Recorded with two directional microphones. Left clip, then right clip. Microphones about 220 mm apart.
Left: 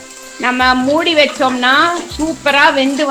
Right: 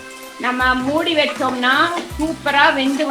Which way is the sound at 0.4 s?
40° left (ahead or behind).